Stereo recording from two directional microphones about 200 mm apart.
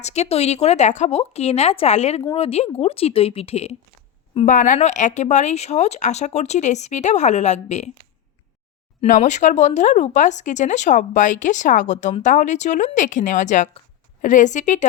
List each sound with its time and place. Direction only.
0.0 s a woman's voice: 35° left (ahead or behind)
9.0 s speech: 35° left (ahead or behind)